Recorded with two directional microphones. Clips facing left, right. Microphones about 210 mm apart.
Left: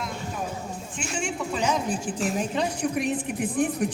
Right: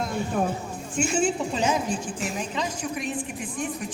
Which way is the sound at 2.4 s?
55° left (ahead or behind).